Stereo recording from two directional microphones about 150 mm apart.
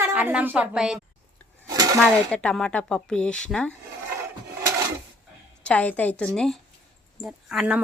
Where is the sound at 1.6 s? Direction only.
25° right (ahead or behind).